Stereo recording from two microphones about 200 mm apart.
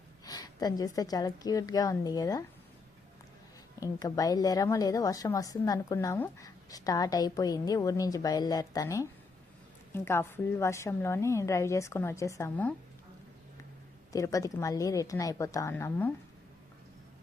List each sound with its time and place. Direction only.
0.3 s a woman's voice: 20° left (ahead or behind)
3.8 s a woman's voice: 15° left (ahead or behind)
14.1 s a woman's voice: 15° left (ahead or behind)